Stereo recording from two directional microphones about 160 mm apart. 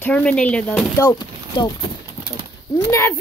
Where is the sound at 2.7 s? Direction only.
15° left (ahead or behind).